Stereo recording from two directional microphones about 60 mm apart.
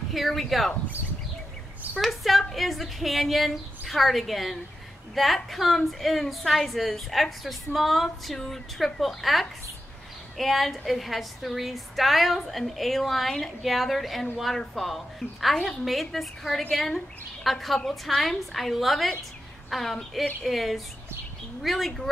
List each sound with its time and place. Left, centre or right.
0.1 s a woman's voice: centre
2.0 s a woman's voice: centre